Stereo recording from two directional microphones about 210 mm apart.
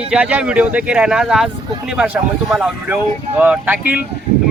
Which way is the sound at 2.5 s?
5° right (ahead or behind).